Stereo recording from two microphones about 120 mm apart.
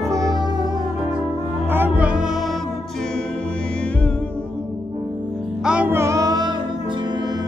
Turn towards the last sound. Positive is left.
turn(degrees=-30)  # may be behind; listen again after turning